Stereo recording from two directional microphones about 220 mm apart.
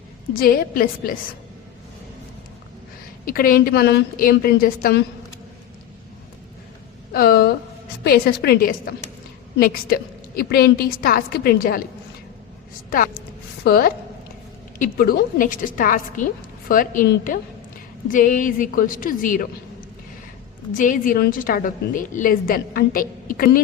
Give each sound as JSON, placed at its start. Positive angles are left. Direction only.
{"t": 0.3, "sound": "a woman's voice", "side_deg": 40}
{"t": 3.2, "sound": "a woman's voice", "side_deg": 40}
{"t": 7.1, "sound": "a sound", "side_deg": 45}
{"t": 8.0, "sound": "a woman's voice", "side_deg": 45}
{"t": 13.7, "sound": "a woman's voice", "side_deg": 45}
{"t": 20.7, "sound": "a woman's voice", "side_deg": 35}